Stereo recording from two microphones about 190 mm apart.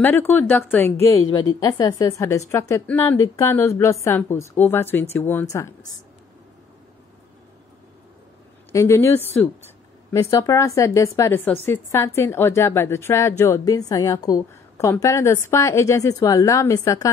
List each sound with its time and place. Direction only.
0.0 s a woman's voice: 10° left (ahead or behind)
1.2 s a woman's voice: 90° left
1.5 s a woman's voice: 20° left (ahead or behind)
8.7 s a woman's voice: 15° left (ahead or behind)